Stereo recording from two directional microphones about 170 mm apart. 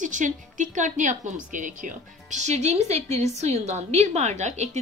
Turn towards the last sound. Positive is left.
turn(degrees=-40)  # may be behind; listen again after turning